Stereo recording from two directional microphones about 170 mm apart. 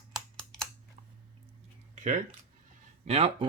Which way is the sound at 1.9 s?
45° right (ahead or behind).